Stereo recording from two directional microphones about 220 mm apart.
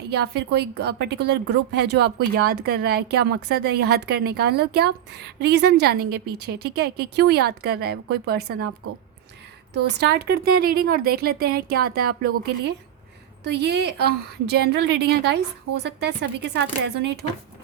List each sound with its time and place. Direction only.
0.1 s a woman's voice: 50° right (ahead or behind)
9.7 s a woman's voice: 50° right (ahead or behind)
13.4 s a woman's voice: 50° right (ahead or behind)